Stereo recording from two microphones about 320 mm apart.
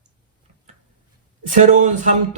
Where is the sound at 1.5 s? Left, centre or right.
Right.